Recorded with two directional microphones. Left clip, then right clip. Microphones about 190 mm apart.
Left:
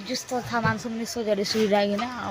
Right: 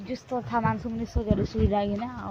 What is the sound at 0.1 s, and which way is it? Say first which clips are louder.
Speech: left 1 dB; 15° left (ahead or behind).